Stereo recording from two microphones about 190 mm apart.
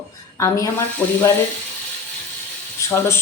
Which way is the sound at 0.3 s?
15° left (ahead or behind).